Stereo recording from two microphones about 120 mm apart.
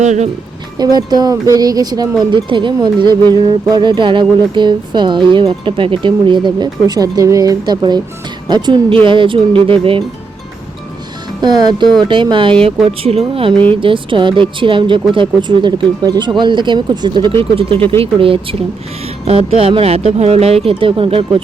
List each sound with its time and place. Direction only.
0.0 s speech: 80° right
0.8 s speech: 35° right (ahead or behind)
11.3 s speech: 35° right (ahead or behind)
12.8 s speech: 60° right (ahead or behind)
13.7 s speech: 45° right (ahead or behind)
17.7 s speech: 15° left (ahead or behind)
18.0 s speech: 50° right (ahead or behind)